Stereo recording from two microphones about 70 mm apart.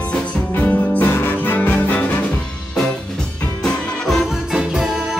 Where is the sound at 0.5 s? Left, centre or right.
Left.